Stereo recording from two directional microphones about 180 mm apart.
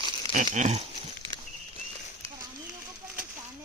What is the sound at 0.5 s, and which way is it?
Speech, 40° right (ahead or behind).